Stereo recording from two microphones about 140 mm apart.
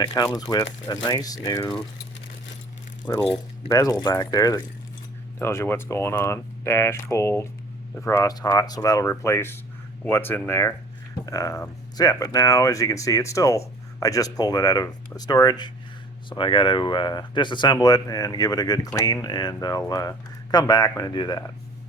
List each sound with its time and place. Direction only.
0.0 s speech: 30° left (ahead or behind)
3.1 s speech: 20° left (ahead or behind)